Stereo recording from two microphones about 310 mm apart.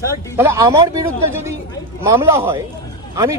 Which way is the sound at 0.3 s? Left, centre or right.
Centre.